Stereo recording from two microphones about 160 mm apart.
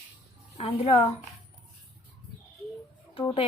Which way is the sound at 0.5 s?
40° left (ahead or behind).